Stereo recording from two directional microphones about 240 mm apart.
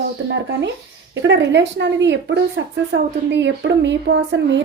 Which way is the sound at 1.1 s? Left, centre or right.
Right.